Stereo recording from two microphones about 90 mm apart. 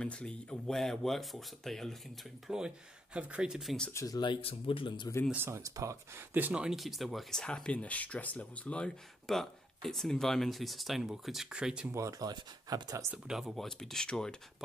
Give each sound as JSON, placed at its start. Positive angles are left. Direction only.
{"t": 0.0, "sound": "speech", "side_deg": 10}
{"t": 2.4, "sound": "speech", "side_deg": -10}
{"t": 3.9, "sound": "speech", "side_deg": 40}
{"t": 4.2, "sound": "speech", "side_deg": 75}
{"t": 5.3, "sound": "speech", "side_deg": -25}
{"t": 5.6, "sound": "speech", "side_deg": -40}
{"t": 6.1, "sound": "speech", "side_deg": -20}
{"t": 6.5, "sound": "speech", "side_deg": -10}
{"t": 11.9, "sound": "speech", "side_deg": -35}
{"t": 13.1, "sound": "speech", "side_deg": -5}